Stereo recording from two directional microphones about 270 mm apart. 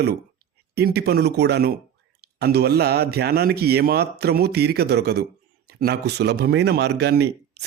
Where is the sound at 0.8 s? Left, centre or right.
Right.